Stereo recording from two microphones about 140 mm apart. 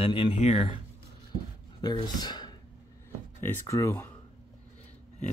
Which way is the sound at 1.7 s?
30° left (ahead or behind).